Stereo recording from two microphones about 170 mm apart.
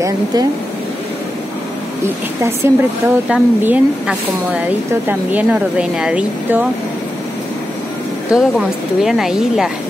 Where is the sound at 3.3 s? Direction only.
5° right (ahead or behind).